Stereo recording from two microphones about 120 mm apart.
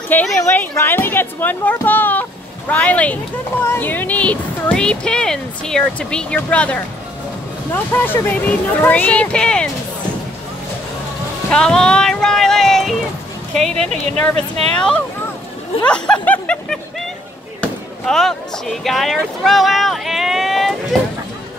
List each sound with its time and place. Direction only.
0.1 s speech: 15° left (ahead or behind)
11.5 s speech: 5° left (ahead or behind)
14.3 s speech: 60° right (ahead or behind)
14.8 s speech: 10° left (ahead or behind)
15.8 s a sound: 10° left (ahead or behind)
17.6 s speech: 5° left (ahead or behind)